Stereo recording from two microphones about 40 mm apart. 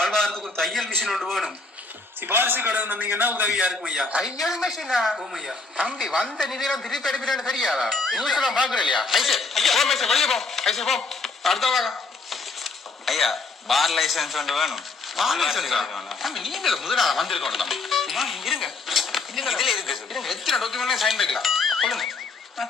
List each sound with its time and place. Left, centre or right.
0.0 s a sound: centre
0.4 s a man's voice: centre
2.2 s a man's voice: right
2.6 s a man's voice: right
3.6 s a man's voice: centre
4.2 s speech: centre
4.8 s speech: centre
8.9 s a man's voice: centre